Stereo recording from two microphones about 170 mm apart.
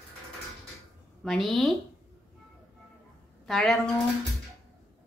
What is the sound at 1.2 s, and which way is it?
Speech, centre (ahead or behind).